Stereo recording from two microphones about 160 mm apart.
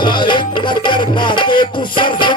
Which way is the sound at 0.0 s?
30° left (ahead or behind).